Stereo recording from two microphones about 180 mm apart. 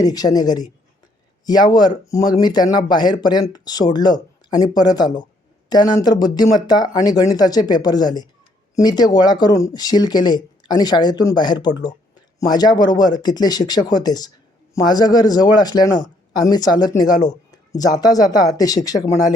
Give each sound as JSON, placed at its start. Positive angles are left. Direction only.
{"t": 0.0, "sound": "speech", "side_deg": 20}